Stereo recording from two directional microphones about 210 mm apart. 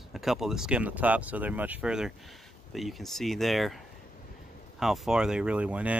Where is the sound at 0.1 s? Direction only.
Centre (ahead or behind).